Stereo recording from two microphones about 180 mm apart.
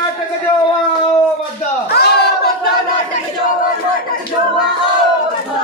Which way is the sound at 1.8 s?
60° left (ahead or behind).